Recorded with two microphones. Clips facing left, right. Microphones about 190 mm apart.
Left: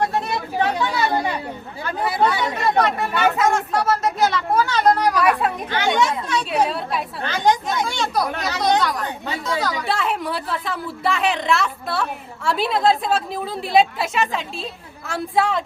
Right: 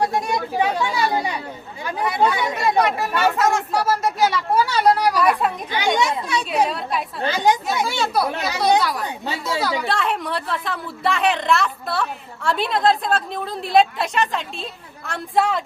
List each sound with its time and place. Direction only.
0.0 s chatter: 10° right (ahead or behind)
2.4 s speech: 10° right (ahead or behind)
6.7 s a woman's voice: centre (ahead or behind)
7.3 s speech: 10° right (ahead or behind)
9.2 s chatter: 30° right (ahead or behind)
9.6 s speech: 10° right (ahead or behind)
9.8 s a woman's voice: centre (ahead or behind)